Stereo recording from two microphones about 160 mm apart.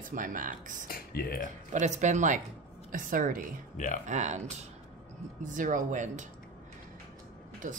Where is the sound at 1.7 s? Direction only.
45° right (ahead or behind).